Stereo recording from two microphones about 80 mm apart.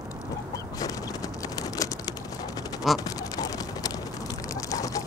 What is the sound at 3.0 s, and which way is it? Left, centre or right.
Quack, left.